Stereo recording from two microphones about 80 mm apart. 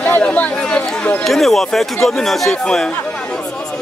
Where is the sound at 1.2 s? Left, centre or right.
Centre.